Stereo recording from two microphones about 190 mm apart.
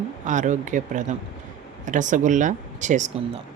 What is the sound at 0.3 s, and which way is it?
Speech, 40° right (ahead or behind).